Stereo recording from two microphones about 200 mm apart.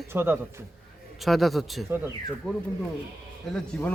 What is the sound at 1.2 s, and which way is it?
Speech, centre (ahead or behind).